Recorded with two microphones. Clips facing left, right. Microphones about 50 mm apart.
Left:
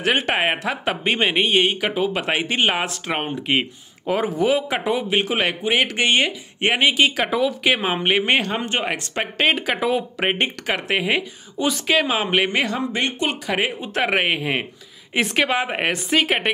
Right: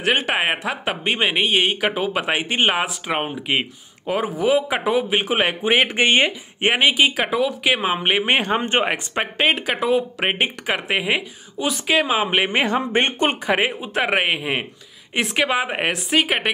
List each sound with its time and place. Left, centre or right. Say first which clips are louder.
0.0 s a woman's voice: even; centre
5.9 s speech: right 2 dB; right
6.6 s a woman's voice: right 1 dB; centre
12.6 s speech: right 4 dB; right
13.5 s a woman's voice: right 3 dB; centre